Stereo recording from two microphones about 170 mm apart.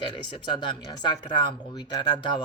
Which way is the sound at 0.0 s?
30° left (ahead or behind).